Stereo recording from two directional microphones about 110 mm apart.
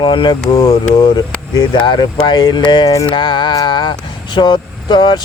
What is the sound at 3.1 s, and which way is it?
Speech, 50° left (ahead or behind).